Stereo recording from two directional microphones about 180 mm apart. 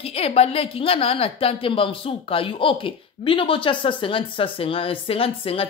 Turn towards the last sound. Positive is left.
turn(degrees=30)  # may be behind; listen again after turning